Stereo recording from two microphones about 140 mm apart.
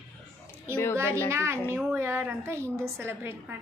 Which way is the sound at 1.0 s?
20° right (ahead or behind).